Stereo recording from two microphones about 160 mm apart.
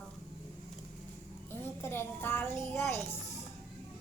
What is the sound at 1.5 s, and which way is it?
Child singing, 15° left (ahead or behind).